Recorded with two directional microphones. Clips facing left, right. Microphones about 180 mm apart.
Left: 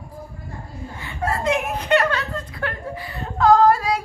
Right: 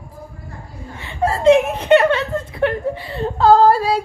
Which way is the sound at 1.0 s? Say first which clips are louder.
Right 7 dB; 25° right (ahead or behind).